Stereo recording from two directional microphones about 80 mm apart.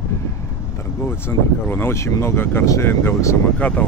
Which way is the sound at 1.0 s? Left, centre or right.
Left.